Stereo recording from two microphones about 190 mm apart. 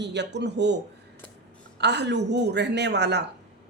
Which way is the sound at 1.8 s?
65° right (ahead or behind).